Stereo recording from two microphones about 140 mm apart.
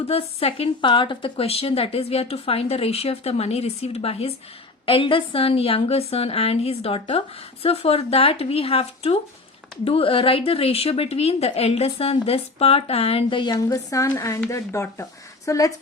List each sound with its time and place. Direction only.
0.1 s a woman's voice: 45° left (ahead or behind); by 15.7 s 25° left (ahead or behind)